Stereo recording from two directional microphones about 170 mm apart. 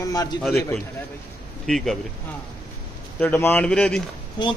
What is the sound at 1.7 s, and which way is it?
Speech, centre (ahead or behind).